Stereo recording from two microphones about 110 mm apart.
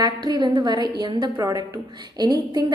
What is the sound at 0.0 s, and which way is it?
A woman's voice, 40° right (ahead or behind).